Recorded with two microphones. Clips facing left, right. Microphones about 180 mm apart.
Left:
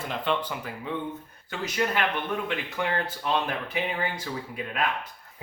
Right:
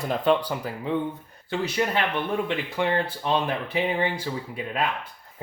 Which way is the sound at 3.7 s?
30° right (ahead or behind).